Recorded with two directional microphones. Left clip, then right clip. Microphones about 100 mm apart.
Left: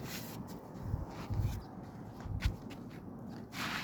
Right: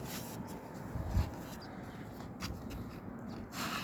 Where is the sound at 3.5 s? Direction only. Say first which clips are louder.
Left 1 dB; 55° right (ahead or behind).